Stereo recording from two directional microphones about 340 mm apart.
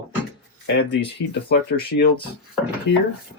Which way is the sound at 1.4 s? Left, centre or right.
Left.